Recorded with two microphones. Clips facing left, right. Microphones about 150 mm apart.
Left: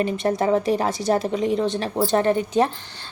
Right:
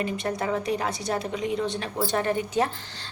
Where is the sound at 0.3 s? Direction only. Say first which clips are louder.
Left 8 dB; 35° left (ahead or behind).